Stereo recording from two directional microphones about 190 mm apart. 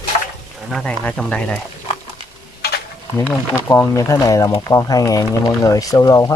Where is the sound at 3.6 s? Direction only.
15° left (ahead or behind).